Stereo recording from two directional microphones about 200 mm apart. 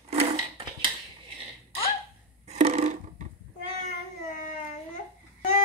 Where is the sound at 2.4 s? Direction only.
35° right (ahead or behind).